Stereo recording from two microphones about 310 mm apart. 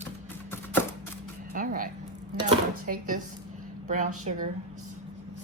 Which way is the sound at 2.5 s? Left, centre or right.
Right.